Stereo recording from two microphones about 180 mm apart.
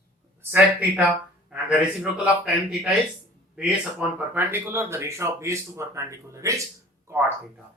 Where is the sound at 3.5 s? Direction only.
10° right (ahead or behind).